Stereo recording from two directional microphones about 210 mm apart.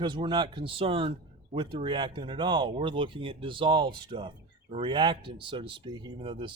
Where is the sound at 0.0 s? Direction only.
20° right (ahead or behind).